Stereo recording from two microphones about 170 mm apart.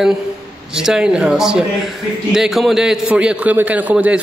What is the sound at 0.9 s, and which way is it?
A man's voice, 5° right (ahead or behind).